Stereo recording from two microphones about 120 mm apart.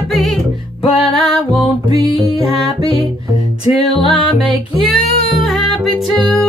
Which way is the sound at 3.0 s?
50° left (ahead or behind).